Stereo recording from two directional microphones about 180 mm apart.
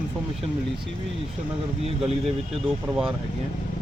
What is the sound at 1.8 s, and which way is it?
Speech, 35° right (ahead or behind).